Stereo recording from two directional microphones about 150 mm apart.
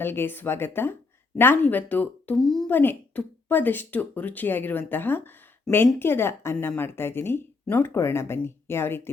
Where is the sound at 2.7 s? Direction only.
15° left (ahead or behind).